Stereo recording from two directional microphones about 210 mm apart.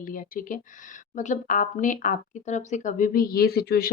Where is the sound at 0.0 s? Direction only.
40° left (ahead or behind).